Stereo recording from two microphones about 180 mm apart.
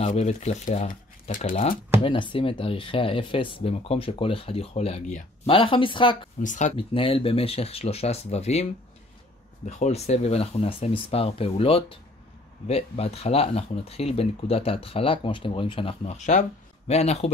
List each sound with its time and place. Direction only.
0.0 s speech: 40° left (ahead or behind)
2.0 s speech: 30° left (ahead or behind)
6.4 s speech: 45° left (ahead or behind)
6.9 s speech: 30° left (ahead or behind)
9.7 s speech: 40° left (ahead or behind)